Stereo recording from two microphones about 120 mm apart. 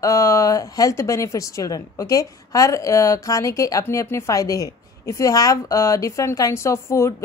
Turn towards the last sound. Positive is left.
turn(degrees=25)  # may be behind; listen again after turning